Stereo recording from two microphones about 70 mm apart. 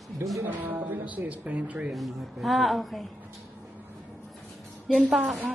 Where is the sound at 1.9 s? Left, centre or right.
Centre.